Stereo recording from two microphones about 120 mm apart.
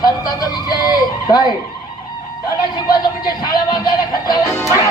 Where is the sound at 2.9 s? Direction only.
35° left (ahead or behind).